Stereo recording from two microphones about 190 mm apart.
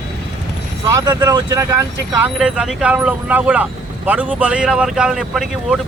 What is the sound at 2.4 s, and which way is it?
Speech, 5° right (ahead or behind).